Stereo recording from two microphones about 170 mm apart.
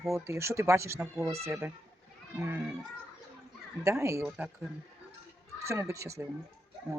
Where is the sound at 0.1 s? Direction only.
15° right (ahead or behind).